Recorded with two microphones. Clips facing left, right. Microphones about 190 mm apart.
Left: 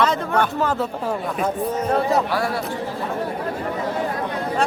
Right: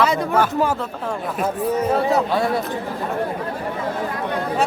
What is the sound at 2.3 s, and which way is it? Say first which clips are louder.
Speech: right 3 dB; 20° right (ahead or behind).